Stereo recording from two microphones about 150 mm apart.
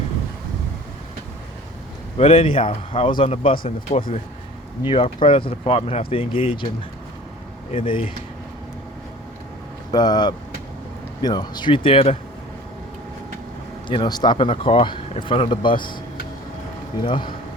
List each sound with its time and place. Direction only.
2.1 s speech: 40° left (ahead or behind)
3.9 s speech: 20° left (ahead or behind)
4.9 s speech: 35° left (ahead or behind)
9.9 s speech: 30° left (ahead or behind)
13.8 s speech: 30° left (ahead or behind)
17.0 s speech: 35° left (ahead or behind)